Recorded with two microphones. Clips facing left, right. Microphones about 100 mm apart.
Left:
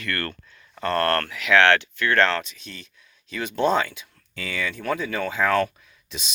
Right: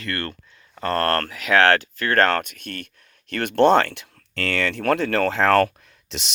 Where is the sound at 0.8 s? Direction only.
35° right (ahead or behind).